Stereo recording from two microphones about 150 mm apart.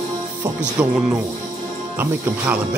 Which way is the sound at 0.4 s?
5° right (ahead or behind).